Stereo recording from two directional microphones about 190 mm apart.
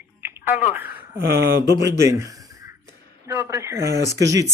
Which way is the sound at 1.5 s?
60° right (ahead or behind).